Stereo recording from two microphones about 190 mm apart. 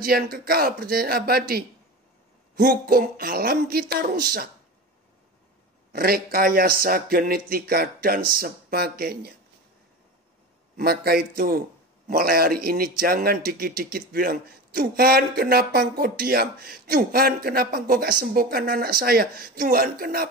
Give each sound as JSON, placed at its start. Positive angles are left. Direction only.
{"t": 0.0, "sound": "speech", "side_deg": -50}
{"t": 5.9, "sound": "speech", "side_deg": -50}
{"t": 10.8, "sound": "speech", "side_deg": -55}